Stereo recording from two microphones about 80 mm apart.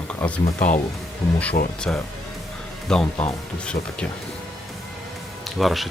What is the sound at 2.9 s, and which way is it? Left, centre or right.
Speech, centre.